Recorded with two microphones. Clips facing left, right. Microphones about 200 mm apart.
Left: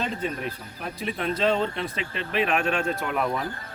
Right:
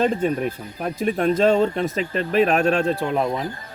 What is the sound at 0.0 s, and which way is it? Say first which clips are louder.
Speech: right 9 dB; 50° right (ahead or behind).